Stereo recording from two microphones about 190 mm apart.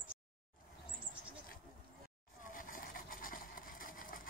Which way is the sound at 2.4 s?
45° left (ahead or behind).